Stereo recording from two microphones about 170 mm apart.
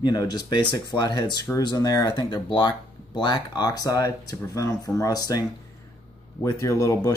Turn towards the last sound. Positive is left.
turn(degrees=20)  # may be behind; listen again after turning